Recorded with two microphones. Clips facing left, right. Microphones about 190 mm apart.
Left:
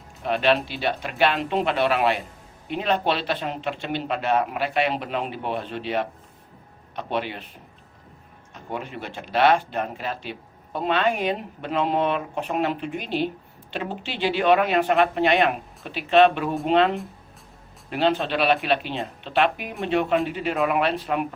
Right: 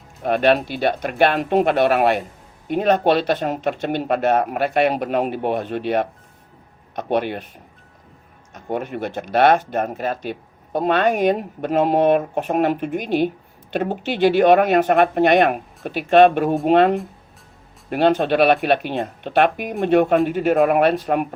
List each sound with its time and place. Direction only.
0.2 s speech: 50° right (ahead or behind)
8.5 s speech: 50° right (ahead or behind)